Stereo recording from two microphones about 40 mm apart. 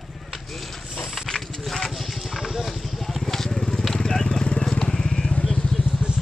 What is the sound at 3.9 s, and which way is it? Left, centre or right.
Vehicle, centre.